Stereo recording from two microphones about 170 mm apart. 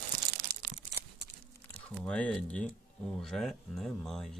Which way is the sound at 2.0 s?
5° left (ahead or behind).